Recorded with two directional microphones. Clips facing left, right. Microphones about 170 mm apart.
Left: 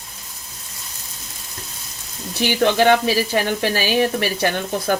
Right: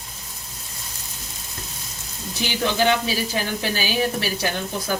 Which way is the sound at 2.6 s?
60° left (ahead or behind).